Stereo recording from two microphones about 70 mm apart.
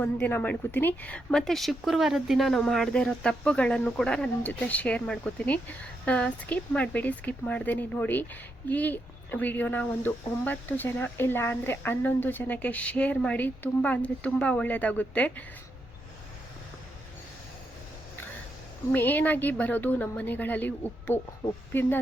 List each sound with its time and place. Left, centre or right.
0.0 s speech: left
1.3 s speech: centre
4.4 s speech: left
18.9 s speech: left